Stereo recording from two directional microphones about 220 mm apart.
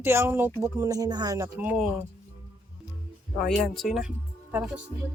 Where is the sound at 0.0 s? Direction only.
10° right (ahead or behind).